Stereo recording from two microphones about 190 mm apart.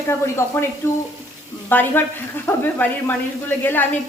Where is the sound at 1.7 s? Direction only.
10° left (ahead or behind).